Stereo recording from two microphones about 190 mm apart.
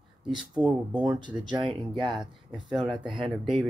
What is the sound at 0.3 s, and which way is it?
Speech, 25° right (ahead or behind).